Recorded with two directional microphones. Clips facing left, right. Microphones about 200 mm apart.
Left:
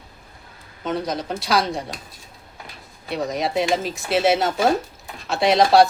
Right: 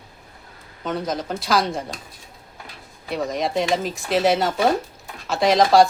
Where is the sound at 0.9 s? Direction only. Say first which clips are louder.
Even; centre (ahead or behind).